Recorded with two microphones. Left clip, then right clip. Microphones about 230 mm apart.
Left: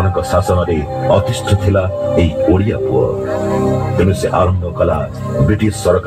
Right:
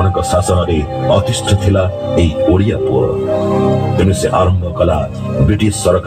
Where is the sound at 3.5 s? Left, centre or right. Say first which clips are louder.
Right 1 dB; right.